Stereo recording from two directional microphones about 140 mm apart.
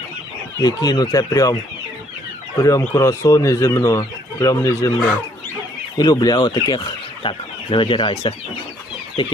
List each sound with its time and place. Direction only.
0.6 s speech: 25° left (ahead or behind)
2.6 s speech: 25° left (ahead or behind)
6.0 s speech: 30° left (ahead or behind)